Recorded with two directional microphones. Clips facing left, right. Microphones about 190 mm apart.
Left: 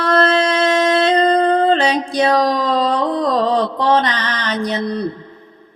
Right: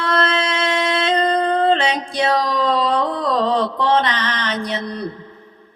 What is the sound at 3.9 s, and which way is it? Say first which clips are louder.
Mantra: left 3 dB; 40° left (ahead or behind).